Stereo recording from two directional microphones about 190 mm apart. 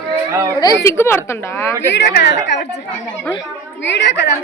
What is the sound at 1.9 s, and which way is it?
Speech, 65° left (ahead or behind).